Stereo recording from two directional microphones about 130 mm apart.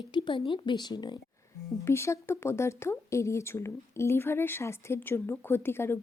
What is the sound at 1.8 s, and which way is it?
Speech, 20° left (ahead or behind).